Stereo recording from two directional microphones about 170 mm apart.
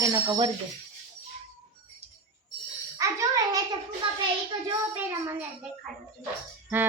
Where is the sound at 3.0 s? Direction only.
15° right (ahead or behind).